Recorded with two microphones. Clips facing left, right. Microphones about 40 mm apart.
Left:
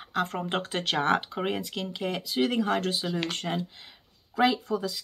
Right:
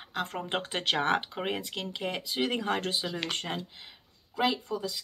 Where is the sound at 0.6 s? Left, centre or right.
Centre.